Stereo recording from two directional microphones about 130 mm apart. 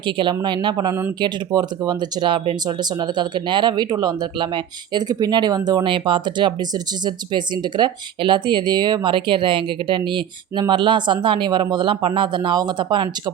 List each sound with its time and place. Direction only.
0.0 s speech: 40° right (ahead or behind)